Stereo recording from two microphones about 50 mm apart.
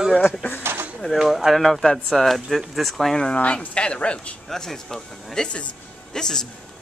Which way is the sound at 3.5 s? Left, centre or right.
Centre.